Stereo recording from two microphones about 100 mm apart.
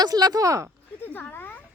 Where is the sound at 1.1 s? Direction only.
20° left (ahead or behind).